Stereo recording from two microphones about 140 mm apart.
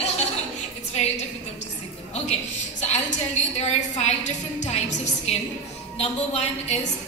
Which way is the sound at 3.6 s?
55° left (ahead or behind).